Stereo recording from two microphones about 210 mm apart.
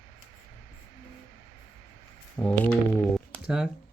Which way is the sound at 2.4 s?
5° left (ahead or behind).